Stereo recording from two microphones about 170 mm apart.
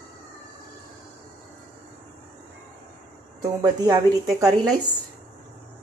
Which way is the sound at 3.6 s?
20° right (ahead or behind).